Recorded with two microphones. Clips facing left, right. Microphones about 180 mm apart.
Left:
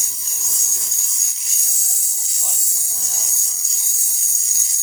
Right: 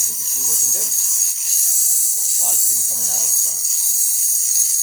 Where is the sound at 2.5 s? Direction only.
Centre (ahead or behind).